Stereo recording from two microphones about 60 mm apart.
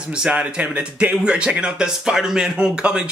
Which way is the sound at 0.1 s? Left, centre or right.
Centre.